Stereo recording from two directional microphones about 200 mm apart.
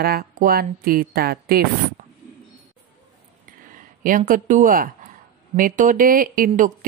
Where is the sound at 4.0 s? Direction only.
40° right (ahead or behind).